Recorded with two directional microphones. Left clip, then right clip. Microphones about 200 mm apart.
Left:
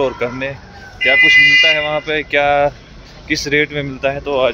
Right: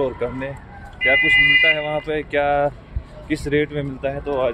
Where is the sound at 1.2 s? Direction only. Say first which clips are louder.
Left 7 dB; 35° left (ahead or behind).